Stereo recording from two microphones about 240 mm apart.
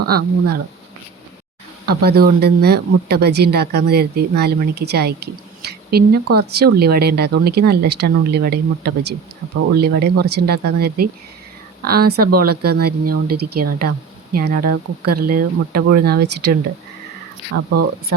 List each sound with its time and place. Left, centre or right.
0.1 s speech: right
1.9 s speech: right